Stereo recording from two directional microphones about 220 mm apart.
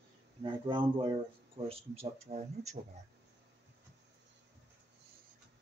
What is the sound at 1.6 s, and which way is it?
Speech, 25° right (ahead or behind).